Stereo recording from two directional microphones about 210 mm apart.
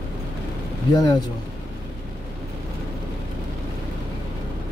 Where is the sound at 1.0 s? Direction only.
20° left (ahead or behind).